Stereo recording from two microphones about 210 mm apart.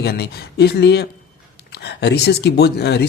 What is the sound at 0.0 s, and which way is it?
A man's voice, 50° left (ahead or behind).